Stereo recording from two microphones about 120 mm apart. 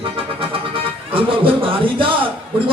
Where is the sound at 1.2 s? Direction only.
50° right (ahead or behind).